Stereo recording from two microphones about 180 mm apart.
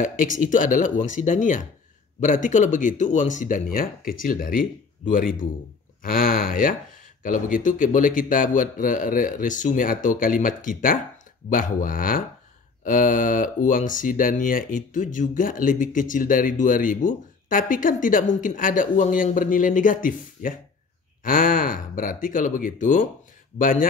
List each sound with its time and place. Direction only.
0.0 s speech: 45° left (ahead or behind)